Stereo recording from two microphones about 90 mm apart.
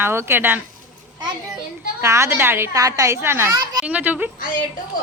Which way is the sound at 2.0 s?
35° right (ahead or behind).